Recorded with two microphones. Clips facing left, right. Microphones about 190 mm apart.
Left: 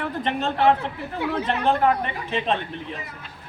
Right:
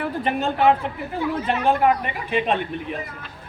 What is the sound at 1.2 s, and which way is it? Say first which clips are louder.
Speech: right 1 dB; 65° left (ahead or behind).